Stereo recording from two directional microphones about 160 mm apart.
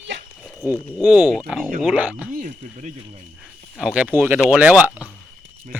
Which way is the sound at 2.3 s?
50° right (ahead or behind).